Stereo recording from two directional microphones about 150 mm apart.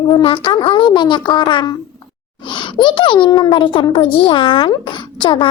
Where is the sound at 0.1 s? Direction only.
35° left (ahead or behind).